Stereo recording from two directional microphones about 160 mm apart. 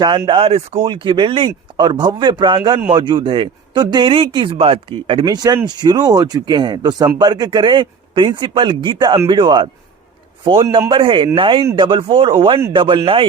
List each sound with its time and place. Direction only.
0.0 s speech: 25° right (ahead or behind)
5.2 s speech: 25° right (ahead or behind)